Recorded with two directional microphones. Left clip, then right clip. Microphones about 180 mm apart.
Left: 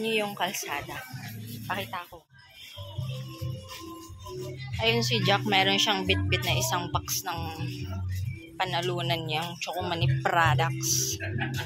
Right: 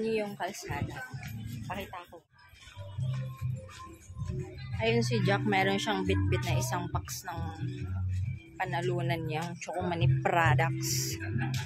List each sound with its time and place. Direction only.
0.0 s speech: centre (ahead or behind)
4.7 s speech: 25° right (ahead or behind)
8.5 s speech: 10° right (ahead or behind); by 11.1 s 35° right (ahead or behind)